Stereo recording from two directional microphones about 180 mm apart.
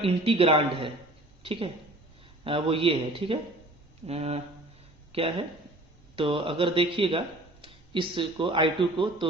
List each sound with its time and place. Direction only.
0.0 s a man's voice: 30° right (ahead or behind)